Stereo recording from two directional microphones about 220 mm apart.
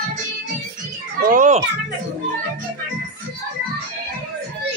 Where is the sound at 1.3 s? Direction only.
35° right (ahead or behind).